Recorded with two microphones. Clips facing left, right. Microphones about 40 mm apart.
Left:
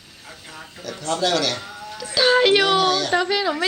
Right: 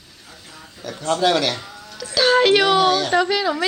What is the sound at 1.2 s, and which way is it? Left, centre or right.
Speech, centre.